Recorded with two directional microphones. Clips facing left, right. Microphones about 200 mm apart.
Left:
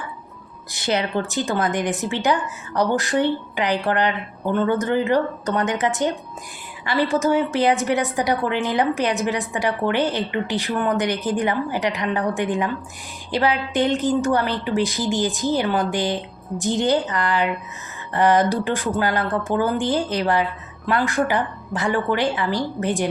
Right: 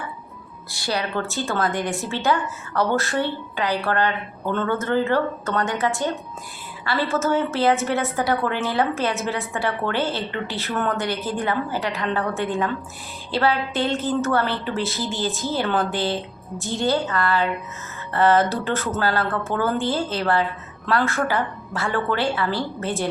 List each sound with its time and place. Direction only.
0.7 s a woman's voice: 20° left (ahead or behind)